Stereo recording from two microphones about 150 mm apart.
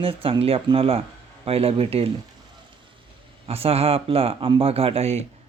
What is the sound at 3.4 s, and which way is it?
Speech, 40° right (ahead or behind).